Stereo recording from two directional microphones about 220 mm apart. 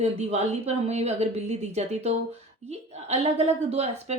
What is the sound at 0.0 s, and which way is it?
A woman's voice, 30° right (ahead or behind).